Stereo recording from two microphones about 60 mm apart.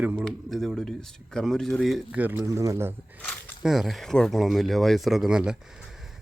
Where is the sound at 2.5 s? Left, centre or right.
Right.